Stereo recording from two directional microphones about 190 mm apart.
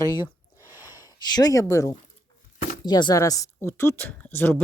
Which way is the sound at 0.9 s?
20° left (ahead or behind).